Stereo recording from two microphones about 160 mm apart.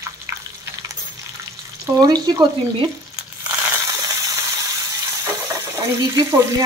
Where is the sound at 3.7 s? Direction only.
20° right (ahead or behind).